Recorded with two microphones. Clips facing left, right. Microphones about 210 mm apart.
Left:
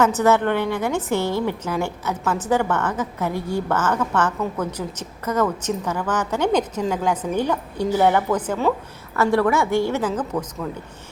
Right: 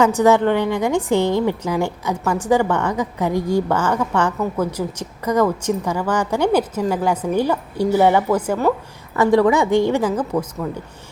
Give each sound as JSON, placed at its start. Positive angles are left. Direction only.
{"t": 0.0, "sound": "a woman's voice", "side_deg": -15}